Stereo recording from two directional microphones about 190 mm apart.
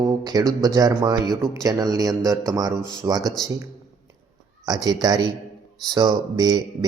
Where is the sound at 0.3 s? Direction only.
20° right (ahead or behind).